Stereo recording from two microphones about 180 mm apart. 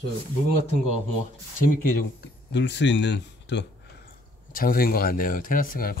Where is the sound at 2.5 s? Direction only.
80° left.